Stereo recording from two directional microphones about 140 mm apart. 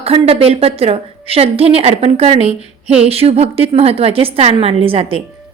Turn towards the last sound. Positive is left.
turn(degrees=-40)  # may be behind; listen again after turning